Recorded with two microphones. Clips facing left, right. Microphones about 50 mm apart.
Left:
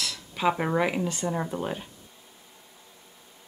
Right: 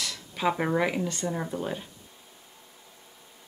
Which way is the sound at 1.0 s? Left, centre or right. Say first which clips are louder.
Left 2 dB; centre.